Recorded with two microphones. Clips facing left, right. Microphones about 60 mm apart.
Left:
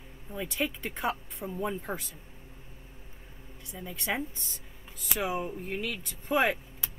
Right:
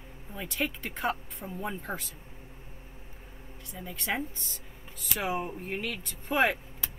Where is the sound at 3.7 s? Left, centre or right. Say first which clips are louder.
Even; centre.